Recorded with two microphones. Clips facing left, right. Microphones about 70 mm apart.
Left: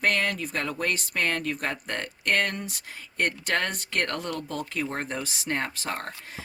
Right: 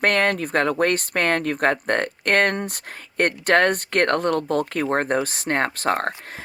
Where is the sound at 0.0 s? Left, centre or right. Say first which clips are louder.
Right 6 dB; right.